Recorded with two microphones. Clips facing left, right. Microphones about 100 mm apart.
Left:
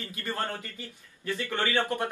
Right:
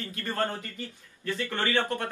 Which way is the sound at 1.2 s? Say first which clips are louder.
Even; 20° left (ahead or behind).